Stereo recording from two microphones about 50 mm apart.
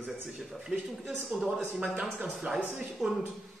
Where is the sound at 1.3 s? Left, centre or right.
Right.